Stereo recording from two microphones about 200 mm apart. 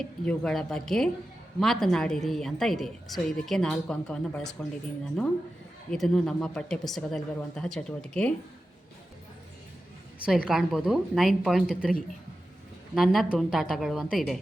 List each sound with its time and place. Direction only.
0.0 s a woman's voice: 5° left (ahead or behind)
10.2 s a woman's voice: centre (ahead or behind)